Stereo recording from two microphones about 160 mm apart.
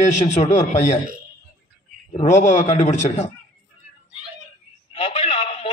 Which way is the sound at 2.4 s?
45° left (ahead or behind).